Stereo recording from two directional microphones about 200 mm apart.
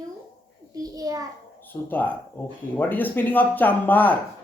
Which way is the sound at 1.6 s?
10° left (ahead or behind).